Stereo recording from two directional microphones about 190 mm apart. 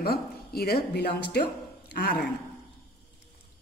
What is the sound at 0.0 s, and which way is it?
Speech, 55° left (ahead or behind).